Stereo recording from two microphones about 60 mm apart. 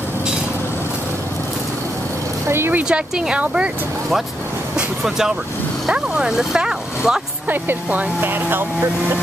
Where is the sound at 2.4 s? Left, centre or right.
Right.